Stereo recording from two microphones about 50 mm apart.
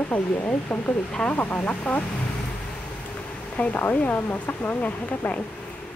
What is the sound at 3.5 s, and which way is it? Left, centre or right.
Speech, left.